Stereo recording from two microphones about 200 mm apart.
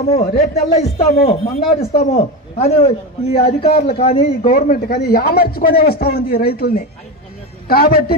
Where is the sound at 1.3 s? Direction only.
30° left (ahead or behind).